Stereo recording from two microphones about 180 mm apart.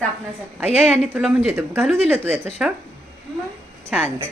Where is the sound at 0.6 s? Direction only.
35° left (ahead or behind).